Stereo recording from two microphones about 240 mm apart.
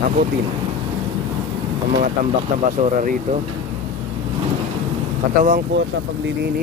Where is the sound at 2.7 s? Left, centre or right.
Right.